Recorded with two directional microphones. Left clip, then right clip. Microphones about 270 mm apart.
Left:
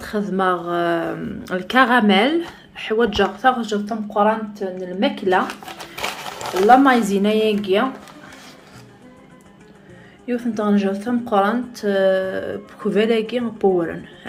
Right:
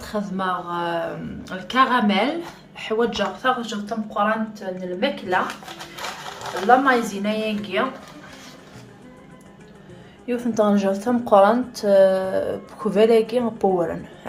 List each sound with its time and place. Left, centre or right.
0.0 s a woman's voice: centre; by 5.4 s left
6.0 s a sound: left
6.8 s a woman's voice: left
10.2 s a woman's voice: centre